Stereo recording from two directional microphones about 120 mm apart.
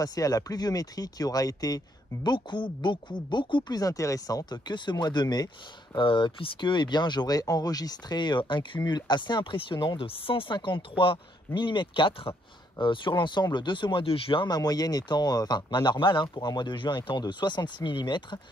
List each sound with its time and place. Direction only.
0.0 s speech: 30° left (ahead or behind)
5.9 s speech: 45° left (ahead or behind)